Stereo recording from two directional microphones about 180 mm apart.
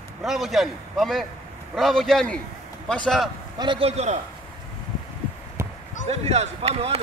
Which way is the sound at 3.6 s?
30° right (ahead or behind).